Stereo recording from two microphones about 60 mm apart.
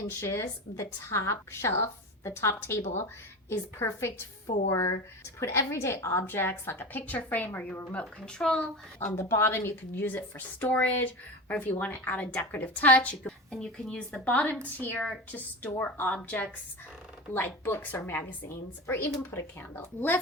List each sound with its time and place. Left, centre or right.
0.1 s a woman's voice: left
6.2 s a woman's voice: left; by 8.7 s centre
9.0 s a woman's voice: left
13.5 s a woman's voice: centre
17.3 s speech: left